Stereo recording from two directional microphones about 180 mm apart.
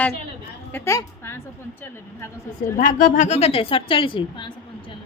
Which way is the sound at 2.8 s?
50° left (ahead or behind).